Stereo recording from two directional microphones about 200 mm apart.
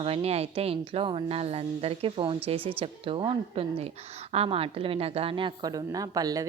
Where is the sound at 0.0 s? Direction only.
30° right (ahead or behind).